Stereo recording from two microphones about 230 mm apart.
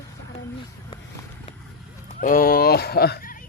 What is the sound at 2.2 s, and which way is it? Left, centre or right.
Speech, left.